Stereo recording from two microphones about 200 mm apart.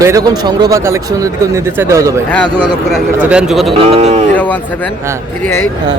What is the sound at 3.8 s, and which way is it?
Speech, 30° right (ahead or behind).